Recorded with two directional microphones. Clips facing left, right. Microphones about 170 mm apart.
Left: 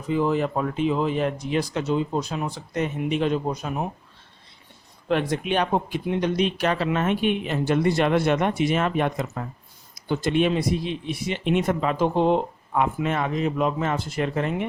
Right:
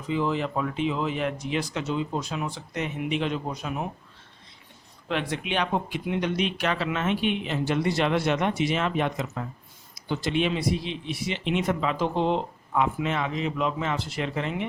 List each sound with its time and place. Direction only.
0.1 s a man's voice: 45° left (ahead or behind)
5.0 s a man's voice: 45° left (ahead or behind)